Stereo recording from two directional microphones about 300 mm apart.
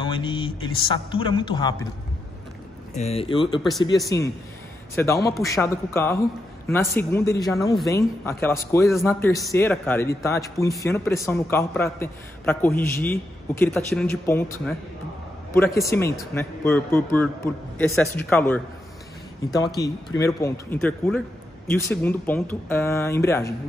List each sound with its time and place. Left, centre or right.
0.0 s a man's voice: centre
2.9 s speech: left
4.9 s a man's voice: centre
15.5 s a man's voice: centre